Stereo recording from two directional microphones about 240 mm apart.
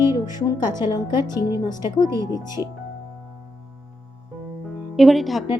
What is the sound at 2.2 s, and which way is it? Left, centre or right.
Speech, centre.